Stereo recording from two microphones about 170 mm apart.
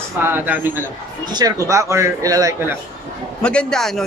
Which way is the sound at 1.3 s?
20° right (ahead or behind).